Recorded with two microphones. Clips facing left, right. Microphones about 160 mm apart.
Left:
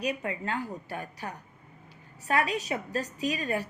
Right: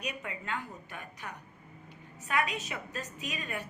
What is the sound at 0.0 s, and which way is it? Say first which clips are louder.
A woman's voice: left 8 dB; 35° left (ahead or behind).